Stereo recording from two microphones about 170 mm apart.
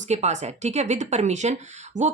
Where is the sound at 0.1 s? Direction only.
40° right (ahead or behind).